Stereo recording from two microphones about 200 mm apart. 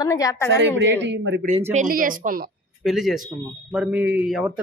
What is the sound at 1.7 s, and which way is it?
Speech, 40° right (ahead or behind).